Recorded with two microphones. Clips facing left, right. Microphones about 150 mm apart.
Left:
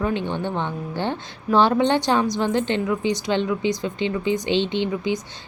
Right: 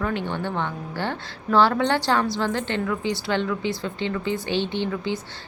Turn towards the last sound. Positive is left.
turn(degrees=15)  # may be behind; listen again after turning